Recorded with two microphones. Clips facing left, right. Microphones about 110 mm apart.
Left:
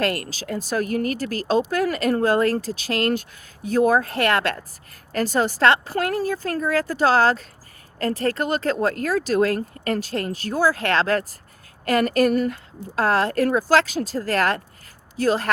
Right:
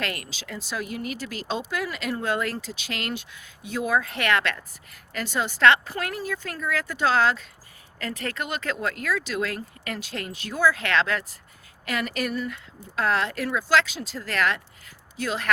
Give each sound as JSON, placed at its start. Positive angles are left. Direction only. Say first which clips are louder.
{"t": 0.0, "sound": "speech", "louder": "left 8 dB", "side_deg": 40}